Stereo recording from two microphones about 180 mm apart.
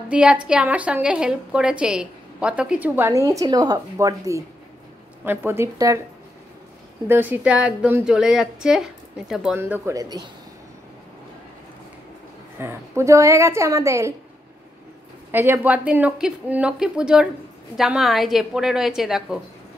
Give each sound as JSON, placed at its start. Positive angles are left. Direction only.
{"t": 0.1, "sound": "a woman's voice", "side_deg": -5}
{"t": 7.1, "sound": "a woman's voice", "side_deg": -10}
{"t": 12.5, "sound": "a woman's voice", "side_deg": -15}
{"t": 15.3, "sound": "a woman's voice", "side_deg": -10}